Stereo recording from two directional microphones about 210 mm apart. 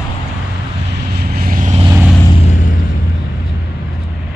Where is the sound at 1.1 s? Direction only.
45° right (ahead or behind).